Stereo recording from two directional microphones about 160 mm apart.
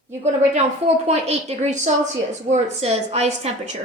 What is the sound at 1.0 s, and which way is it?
A woman's voice, 45° right (ahead or behind).